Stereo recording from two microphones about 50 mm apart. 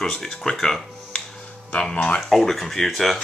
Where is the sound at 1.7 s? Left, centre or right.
Left.